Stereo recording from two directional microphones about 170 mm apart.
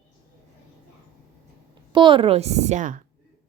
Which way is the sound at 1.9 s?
30° right (ahead or behind).